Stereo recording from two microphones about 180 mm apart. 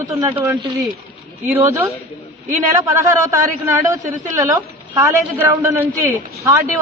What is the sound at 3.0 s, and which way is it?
A man's voice, 15° right (ahead or behind).